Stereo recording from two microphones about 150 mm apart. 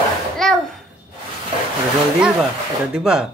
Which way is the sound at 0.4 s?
Centre (ahead or behind).